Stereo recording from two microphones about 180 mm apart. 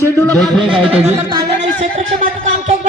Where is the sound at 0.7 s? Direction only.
30° right (ahead or behind).